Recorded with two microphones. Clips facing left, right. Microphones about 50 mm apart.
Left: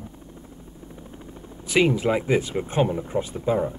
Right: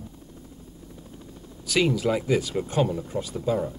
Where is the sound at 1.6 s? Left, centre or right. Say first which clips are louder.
Left 3 dB; left.